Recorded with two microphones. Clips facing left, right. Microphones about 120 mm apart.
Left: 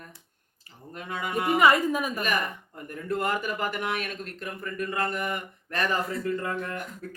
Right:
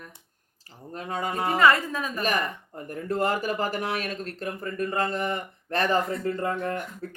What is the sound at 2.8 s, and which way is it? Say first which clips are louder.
Speech: right 3 dB; 35° right (ahead or behind).